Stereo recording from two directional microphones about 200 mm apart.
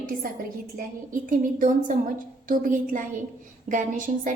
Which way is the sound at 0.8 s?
40° right (ahead or behind).